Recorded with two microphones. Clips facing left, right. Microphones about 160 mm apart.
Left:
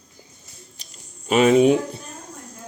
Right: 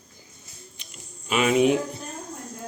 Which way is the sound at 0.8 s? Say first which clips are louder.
Even; 35° left (ahead or behind).